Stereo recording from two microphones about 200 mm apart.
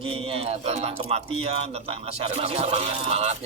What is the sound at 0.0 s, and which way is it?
A man's voice, 30° right (ahead or behind).